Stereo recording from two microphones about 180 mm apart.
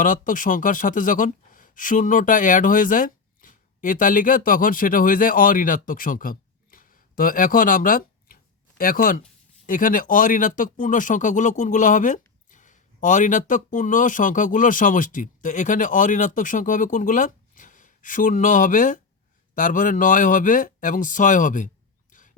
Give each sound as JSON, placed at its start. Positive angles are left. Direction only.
{"t": 0.0, "sound": "speech", "side_deg": 45}